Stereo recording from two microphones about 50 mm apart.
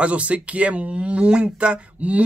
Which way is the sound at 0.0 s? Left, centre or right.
Right.